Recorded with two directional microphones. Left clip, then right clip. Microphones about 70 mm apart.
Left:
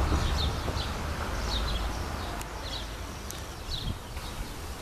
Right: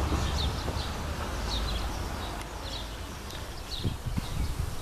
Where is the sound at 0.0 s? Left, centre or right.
Right.